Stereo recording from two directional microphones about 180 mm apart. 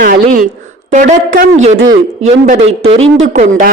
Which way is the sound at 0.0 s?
50° right (ahead or behind).